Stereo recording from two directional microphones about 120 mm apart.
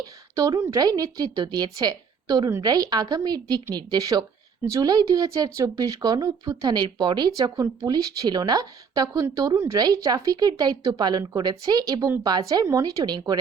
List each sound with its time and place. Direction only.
0.3 s a woman's voice: 25° right (ahead or behind)